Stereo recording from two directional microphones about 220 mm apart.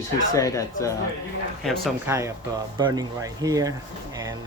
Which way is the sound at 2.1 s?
10° right (ahead or behind).